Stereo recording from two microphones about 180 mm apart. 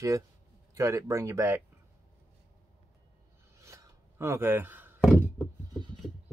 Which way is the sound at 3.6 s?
15° right (ahead or behind).